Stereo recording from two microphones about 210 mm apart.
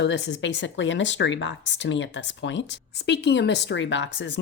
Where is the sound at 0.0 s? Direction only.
55° left (ahead or behind).